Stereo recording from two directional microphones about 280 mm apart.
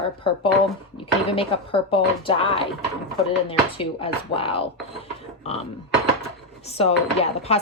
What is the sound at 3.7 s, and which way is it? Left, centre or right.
Speech, centre.